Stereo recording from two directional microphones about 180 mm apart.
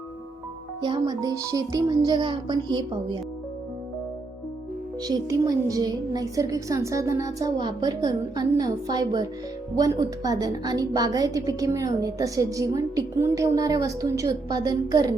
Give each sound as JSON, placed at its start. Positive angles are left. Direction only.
{"t": 0.8, "sound": "a woman's voice", "side_deg": -25}
{"t": 5.0, "sound": "a woman's voice", "side_deg": -20}